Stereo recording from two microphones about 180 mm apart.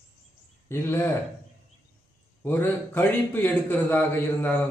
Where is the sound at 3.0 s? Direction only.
10° left (ahead or behind).